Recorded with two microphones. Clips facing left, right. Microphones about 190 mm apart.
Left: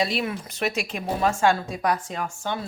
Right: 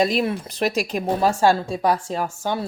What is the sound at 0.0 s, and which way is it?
A woman's voice, 45° right (ahead or behind).